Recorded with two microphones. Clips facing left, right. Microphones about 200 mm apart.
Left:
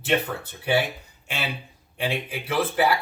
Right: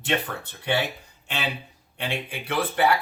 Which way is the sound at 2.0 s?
5° left (ahead or behind).